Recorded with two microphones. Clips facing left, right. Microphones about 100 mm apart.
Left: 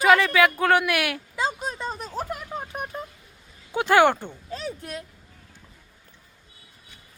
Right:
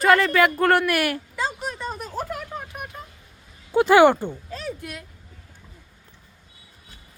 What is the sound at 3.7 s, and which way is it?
Speech, 5° right (ahead or behind).